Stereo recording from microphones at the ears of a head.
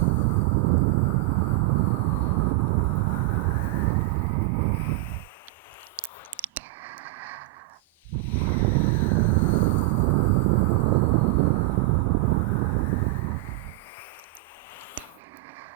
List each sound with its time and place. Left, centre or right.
0.0 s vehicle: right
6.0 s a sound: right
8.4 s vehicle: right